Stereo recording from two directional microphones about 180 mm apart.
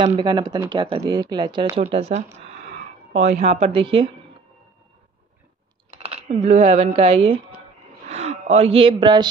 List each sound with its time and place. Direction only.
0.0 s speech: 25° right (ahead or behind)
6.1 s speech: 35° right (ahead or behind)